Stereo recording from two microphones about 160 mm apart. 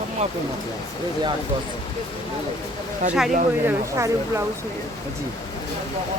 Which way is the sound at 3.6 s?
15° right (ahead or behind).